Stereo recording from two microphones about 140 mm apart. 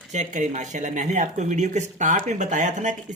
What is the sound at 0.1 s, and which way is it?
Speech, 60° right (ahead or behind).